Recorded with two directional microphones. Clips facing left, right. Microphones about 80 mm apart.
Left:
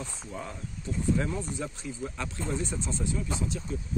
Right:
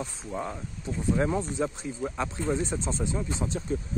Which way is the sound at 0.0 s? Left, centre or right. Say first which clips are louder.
Right 5 dB; right.